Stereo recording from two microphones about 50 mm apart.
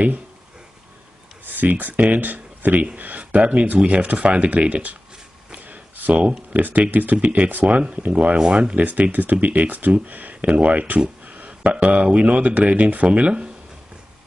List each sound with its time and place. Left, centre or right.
1.4 s speech: right
5.5 s a sound: right
6.5 s speech: right